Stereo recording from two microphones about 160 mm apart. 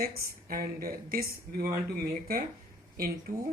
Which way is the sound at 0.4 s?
65° right (ahead or behind).